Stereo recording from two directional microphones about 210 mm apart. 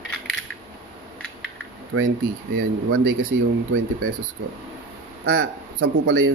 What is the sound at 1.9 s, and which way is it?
Speech, 70° right (ahead or behind).